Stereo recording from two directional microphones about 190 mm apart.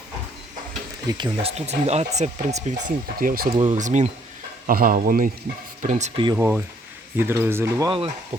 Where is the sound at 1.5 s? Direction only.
35° right (ahead or behind); by 3.6 s 50° right (ahead or behind).